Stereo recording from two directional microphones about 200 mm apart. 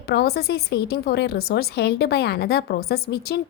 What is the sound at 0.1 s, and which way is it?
A woman's voice, 50° left (ahead or behind).